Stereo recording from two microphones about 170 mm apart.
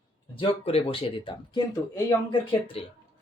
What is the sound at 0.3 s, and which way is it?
Speech, 35° left (ahead or behind).